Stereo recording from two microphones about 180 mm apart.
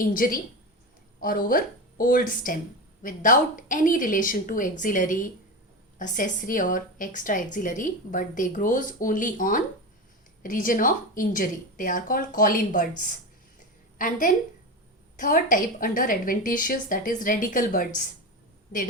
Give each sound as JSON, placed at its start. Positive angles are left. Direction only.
{"t": 0.0, "sound": "a woman's voice", "side_deg": 50}